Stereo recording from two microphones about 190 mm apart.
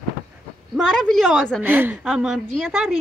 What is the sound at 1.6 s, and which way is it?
A woman's voice, 10° right (ahead or behind).